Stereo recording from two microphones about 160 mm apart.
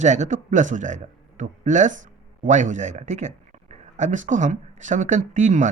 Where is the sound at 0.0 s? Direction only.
50° right (ahead or behind).